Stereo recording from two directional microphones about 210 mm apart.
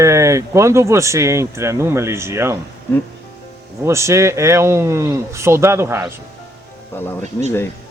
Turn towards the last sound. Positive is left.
turn(degrees=-35)  # may be behind; listen again after turning